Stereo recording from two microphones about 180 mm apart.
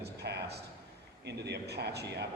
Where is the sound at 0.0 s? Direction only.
65° right (ahead or behind).